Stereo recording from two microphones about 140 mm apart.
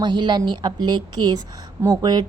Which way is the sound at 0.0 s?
35° right (ahead or behind).